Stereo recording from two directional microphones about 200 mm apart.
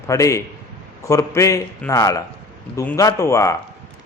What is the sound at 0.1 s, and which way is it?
A man's voice, 15° left (ahead or behind).